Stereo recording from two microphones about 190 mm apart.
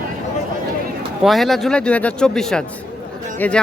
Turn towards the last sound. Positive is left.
turn(degrees=10)  # may be behind; listen again after turning